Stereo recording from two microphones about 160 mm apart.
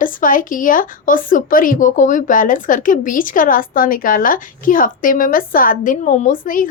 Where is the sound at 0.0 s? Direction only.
55° left (ahead or behind).